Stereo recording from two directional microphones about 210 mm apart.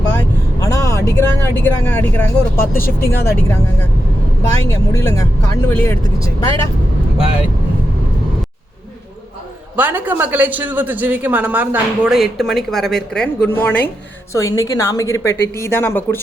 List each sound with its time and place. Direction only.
0.2 s vehicle: 15° left (ahead or behind)
2.6 s speech: 45° left (ahead or behind)
3.1 s a woman's voice: 10° left (ahead or behind)
9.7 s a man's voice: 10° right (ahead or behind); by 16.2 s 10° left (ahead or behind)